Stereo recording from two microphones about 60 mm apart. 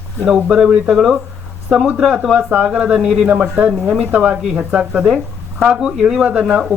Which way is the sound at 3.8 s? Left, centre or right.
Centre.